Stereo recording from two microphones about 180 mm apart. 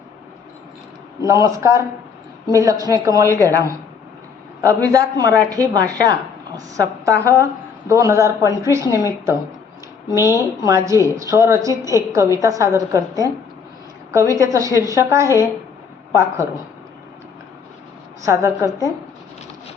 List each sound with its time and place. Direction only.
1.3 s a woman's voice: 15° right (ahead or behind)
10.2 s a woman's voice: 15° right (ahead or behind)
18.2 s speech: 15° right (ahead or behind)